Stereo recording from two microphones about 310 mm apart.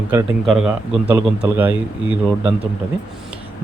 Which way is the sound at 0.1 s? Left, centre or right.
Centre.